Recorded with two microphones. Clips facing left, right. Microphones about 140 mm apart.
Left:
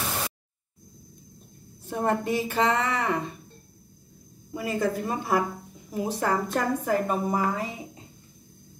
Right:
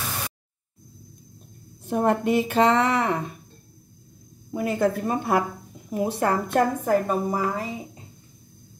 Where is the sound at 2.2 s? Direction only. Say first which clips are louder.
Right 5 dB; 65° right (ahead or behind).